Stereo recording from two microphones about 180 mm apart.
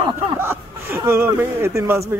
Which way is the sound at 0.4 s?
10° right (ahead or behind).